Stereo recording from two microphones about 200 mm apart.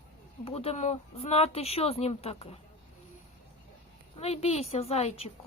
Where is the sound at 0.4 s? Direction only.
30° left (ahead or behind).